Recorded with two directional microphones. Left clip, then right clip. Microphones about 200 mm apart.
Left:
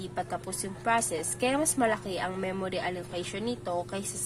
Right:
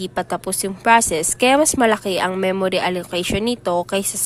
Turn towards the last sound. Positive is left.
turn(degrees=-50)  # may be behind; listen again after turning